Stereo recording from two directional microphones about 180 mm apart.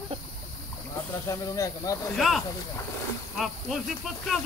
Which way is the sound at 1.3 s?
20° left (ahead or behind).